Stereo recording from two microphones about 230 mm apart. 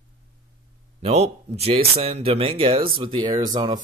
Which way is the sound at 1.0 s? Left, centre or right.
Right.